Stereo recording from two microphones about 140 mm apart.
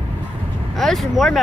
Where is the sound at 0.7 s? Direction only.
Centre (ahead or behind).